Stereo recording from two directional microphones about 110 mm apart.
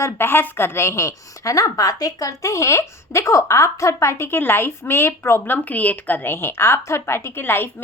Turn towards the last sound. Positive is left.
turn(degrees=20)  # may be behind; listen again after turning